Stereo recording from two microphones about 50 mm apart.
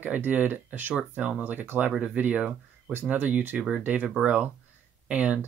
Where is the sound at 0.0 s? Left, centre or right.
Right.